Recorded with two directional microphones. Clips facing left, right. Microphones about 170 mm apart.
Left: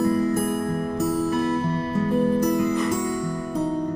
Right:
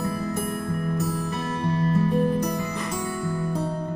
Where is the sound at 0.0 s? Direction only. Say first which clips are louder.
Left 7 dB; centre (ahead or behind).